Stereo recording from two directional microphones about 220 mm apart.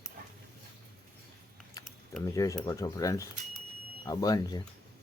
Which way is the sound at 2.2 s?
15° left (ahead or behind).